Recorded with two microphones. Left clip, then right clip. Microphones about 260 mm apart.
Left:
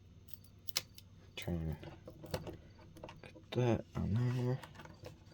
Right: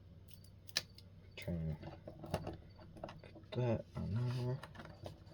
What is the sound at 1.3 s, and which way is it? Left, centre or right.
Speech, left.